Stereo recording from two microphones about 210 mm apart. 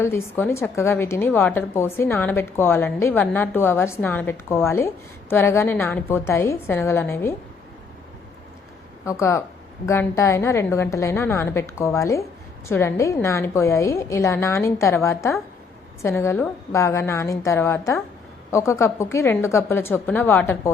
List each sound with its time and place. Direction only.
0.0 s a woman's voice: 10° left (ahead or behind)
9.0 s a woman's voice: 15° left (ahead or behind)